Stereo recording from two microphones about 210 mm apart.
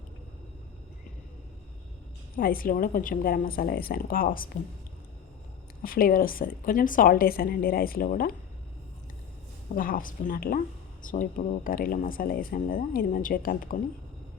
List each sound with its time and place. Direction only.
2.3 s a woman's voice: 45° left (ahead or behind)
5.8 s a woman's voice: 45° left (ahead or behind)
9.7 s speech: 40° left (ahead or behind)